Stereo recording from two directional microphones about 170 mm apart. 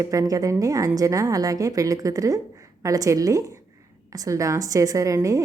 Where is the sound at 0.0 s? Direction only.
20° right (ahead or behind).